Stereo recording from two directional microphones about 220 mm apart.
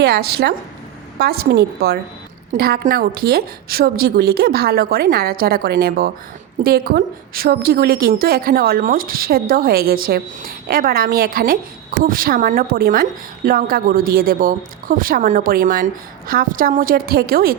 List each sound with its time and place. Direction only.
0.0 s a woman's voice: 45° right (ahead or behind)